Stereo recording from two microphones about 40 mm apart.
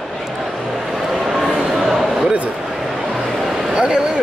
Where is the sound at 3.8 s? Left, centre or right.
Centre.